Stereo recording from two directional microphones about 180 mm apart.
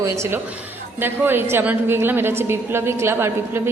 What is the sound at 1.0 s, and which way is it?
A woman's voice, 10° right (ahead or behind).